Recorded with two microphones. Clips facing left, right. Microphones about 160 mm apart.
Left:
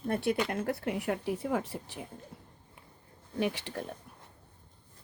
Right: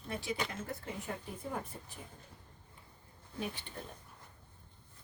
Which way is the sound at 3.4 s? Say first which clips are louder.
Left 9 dB; 80° left.